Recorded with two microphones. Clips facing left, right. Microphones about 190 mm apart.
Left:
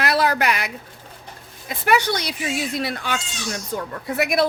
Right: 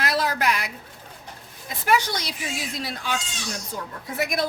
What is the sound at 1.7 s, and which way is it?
A woman's voice, 65° left (ahead or behind).